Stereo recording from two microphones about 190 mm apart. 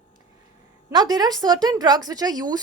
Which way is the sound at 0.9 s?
20° right (ahead or behind).